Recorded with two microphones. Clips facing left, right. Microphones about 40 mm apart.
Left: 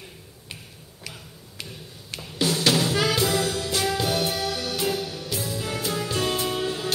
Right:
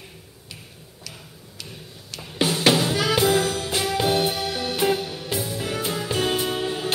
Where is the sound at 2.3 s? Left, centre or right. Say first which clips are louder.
Right 3 dB; right.